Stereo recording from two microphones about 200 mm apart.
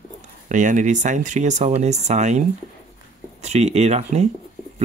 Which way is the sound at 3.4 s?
35° right (ahead or behind).